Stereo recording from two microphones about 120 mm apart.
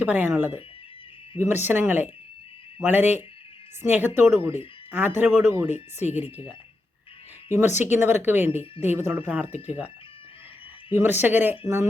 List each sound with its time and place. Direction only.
0.0 s speech: 15° right (ahead or behind)
5.7 s speech: 70° left (ahead or behind)
6.1 s speech: 15° right (ahead or behind)
7.9 s speech: 20° right (ahead or behind)
10.9 s speech: 15° right (ahead or behind)